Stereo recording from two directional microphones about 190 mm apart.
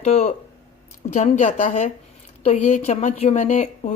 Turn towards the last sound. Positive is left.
turn(degrees=35)  # may be behind; listen again after turning